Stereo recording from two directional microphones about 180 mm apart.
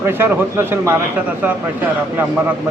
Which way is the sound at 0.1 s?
10° right (ahead or behind).